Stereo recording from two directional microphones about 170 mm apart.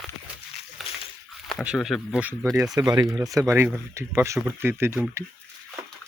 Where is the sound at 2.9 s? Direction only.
20° right (ahead or behind).